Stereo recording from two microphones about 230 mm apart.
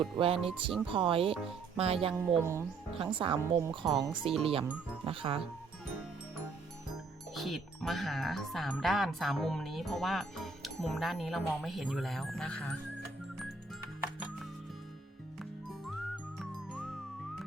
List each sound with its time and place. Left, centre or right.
0.2 s speech: right
2.1 s speech: centre
3.0 s speech: right
7.3 s speech: centre
15.9 s whistling: centre